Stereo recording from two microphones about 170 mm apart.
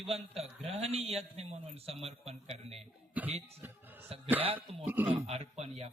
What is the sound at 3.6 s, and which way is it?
Music, 10° right (ahead or behind).